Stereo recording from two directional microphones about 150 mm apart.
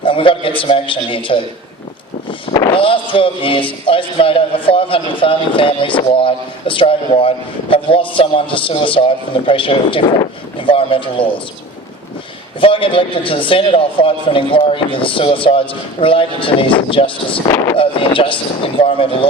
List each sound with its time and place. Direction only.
0.0 s a man's voice: 35° left (ahead or behind)
2.7 s speech: 35° left (ahead or behind)
12.5 s speech: 35° left (ahead or behind)